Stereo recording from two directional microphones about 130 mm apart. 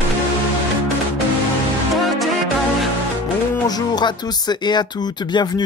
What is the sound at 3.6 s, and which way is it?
Speech, 30° left (ahead or behind).